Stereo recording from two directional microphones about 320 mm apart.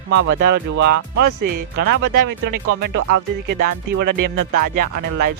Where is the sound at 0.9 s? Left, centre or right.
Right.